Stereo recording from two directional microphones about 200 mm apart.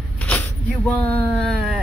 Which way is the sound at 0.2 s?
5° left (ahead or behind).